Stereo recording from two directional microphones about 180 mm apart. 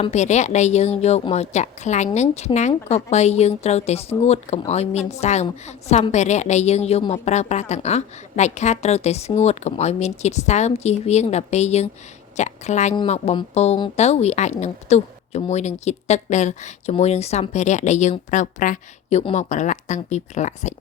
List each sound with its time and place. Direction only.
0.0 s a woman's voice: 40° left (ahead or behind)